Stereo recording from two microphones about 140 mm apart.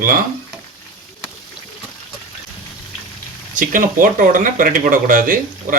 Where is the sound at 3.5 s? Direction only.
75° right (ahead or behind).